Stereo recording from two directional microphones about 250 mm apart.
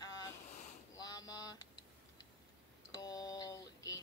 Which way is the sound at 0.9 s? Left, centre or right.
Centre.